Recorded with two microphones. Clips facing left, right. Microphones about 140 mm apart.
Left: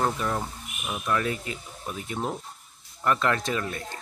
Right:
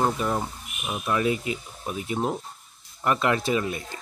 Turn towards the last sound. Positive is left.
turn(degrees=-15)  # may be behind; listen again after turning